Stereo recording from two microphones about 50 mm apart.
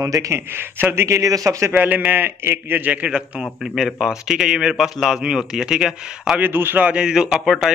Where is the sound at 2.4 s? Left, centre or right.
Right.